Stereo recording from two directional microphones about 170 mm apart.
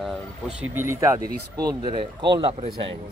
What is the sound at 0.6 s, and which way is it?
Speech, 15° right (ahead or behind).